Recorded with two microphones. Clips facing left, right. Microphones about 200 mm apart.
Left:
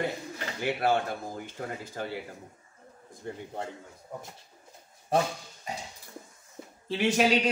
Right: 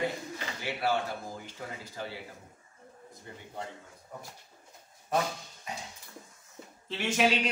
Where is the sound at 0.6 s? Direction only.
50° left (ahead or behind).